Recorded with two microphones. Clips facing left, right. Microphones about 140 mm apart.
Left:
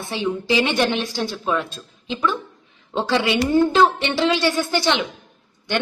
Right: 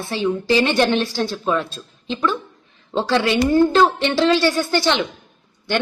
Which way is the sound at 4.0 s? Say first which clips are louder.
Right 3 dB; 15° left (ahead or behind).